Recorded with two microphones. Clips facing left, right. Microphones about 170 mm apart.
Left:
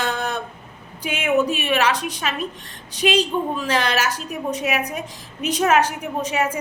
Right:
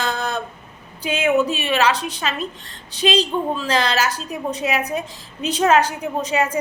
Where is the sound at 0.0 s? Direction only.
10° left (ahead or behind).